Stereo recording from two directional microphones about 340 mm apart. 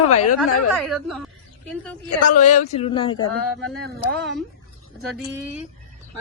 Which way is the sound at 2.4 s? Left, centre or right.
Left.